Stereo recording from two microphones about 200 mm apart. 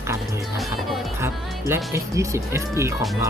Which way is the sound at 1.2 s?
10° right (ahead or behind).